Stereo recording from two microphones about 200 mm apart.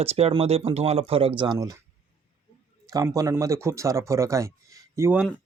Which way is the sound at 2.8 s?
15° right (ahead or behind).